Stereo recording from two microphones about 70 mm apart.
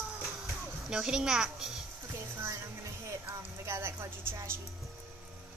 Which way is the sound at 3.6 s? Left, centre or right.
Right.